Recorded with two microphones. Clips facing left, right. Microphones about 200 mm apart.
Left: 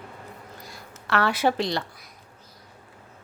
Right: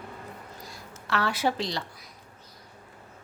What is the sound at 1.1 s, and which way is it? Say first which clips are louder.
Speech: left 4 dB; 60° left (ahead or behind).